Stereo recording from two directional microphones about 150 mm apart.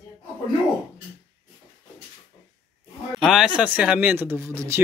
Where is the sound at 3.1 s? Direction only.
Centre (ahead or behind); by 4.8 s 20° right (ahead or behind).